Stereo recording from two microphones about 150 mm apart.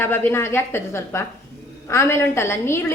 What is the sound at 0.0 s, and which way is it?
A woman's voice, 15° left (ahead or behind).